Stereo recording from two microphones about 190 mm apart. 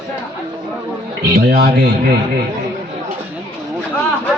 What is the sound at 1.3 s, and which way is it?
Speech, 60° right (ahead or behind).